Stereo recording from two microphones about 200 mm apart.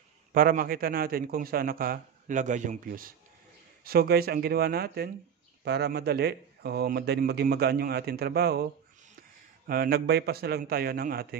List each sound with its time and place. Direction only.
0.3 s a man's voice: 45° right (ahead or behind)
9.7 s a man's voice: 50° right (ahead or behind)